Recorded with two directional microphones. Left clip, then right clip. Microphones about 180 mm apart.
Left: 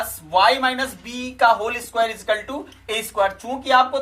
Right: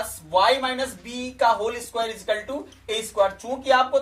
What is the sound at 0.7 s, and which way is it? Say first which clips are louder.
Speech: left 3 dB; 55° left (ahead or behind).